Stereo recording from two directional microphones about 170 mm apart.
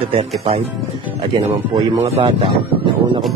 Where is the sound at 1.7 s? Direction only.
30° right (ahead or behind).